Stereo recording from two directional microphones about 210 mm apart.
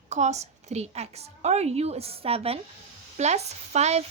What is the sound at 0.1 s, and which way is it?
A woman's voice, 35° right (ahead or behind).